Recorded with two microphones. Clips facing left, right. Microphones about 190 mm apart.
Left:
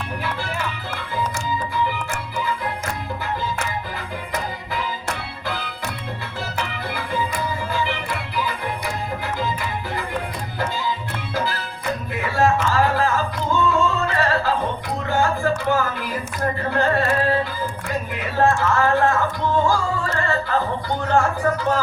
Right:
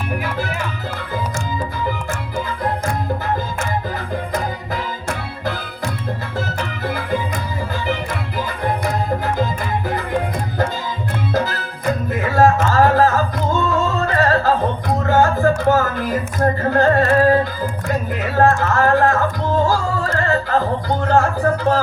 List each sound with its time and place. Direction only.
6.6 s music: 45° right (ahead or behind)
8.4 s music: 45° right (ahead or behind)
11.3 s music: 45° right (ahead or behind)
17.8 s a sound: 40° right (ahead or behind)
19.6 s music: 40° right (ahead or behind)
21.5 s a sound: 35° right (ahead or behind)